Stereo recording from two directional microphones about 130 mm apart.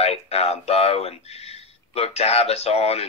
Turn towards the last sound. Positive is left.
turn(degrees=50)  # may be behind; listen again after turning